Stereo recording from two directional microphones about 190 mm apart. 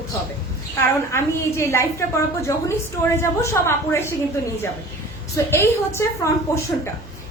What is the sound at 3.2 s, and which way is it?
Speech, 15° left (ahead or behind).